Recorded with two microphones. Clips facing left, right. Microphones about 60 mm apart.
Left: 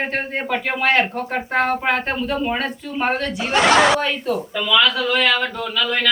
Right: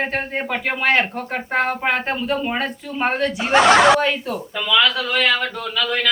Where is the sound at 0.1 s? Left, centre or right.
Centre.